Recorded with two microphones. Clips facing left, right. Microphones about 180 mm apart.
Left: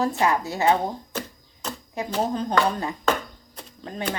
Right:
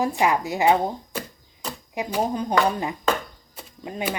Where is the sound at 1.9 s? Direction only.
15° right (ahead or behind).